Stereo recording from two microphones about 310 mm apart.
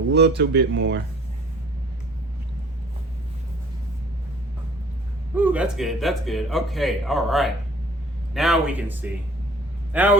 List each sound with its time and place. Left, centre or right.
0.1 s speech: right
5.3 s a man's voice: centre